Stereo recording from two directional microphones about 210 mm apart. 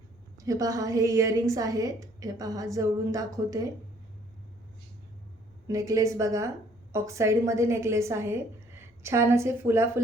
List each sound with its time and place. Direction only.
0.3 s a woman's voice: 15° right (ahead or behind)
5.6 s a woman's voice: 15° right (ahead or behind)